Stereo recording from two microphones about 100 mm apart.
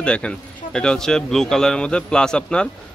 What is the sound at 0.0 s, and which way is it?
A man's voice, 10° left (ahead or behind).